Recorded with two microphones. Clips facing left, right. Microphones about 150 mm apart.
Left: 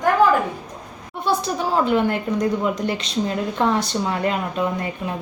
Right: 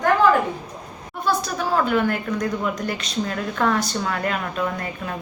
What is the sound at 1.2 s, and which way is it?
A woman's voice, 25° left (ahead or behind).